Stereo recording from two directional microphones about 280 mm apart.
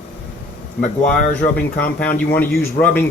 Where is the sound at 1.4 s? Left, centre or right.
Left.